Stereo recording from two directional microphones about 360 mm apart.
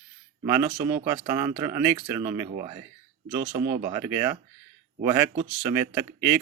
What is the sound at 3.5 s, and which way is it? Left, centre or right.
Speech, right.